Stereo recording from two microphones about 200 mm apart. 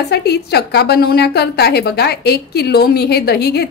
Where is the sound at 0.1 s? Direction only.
55° left (ahead or behind).